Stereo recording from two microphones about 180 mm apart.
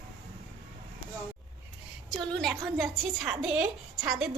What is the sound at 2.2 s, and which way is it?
A woman's voice, 5° left (ahead or behind).